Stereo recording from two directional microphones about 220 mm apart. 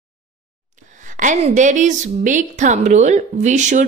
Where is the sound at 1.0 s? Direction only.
35° right (ahead or behind).